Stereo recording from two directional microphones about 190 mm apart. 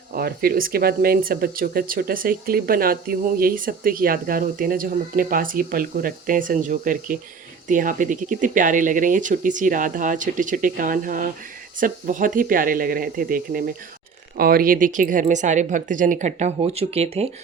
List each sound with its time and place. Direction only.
0.1 s speech: 50° right (ahead or behind); by 17.2 s 35° right (ahead or behind)